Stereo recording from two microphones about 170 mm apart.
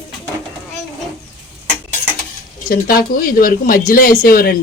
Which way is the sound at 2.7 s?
60° left (ahead or behind).